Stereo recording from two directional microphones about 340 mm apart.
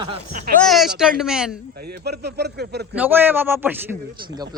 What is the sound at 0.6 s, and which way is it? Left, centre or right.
Speech, centre.